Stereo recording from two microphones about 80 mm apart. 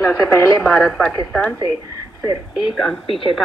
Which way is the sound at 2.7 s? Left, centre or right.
Centre.